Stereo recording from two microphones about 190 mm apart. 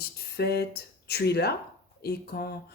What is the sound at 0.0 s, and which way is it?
Speech, 55° left (ahead or behind).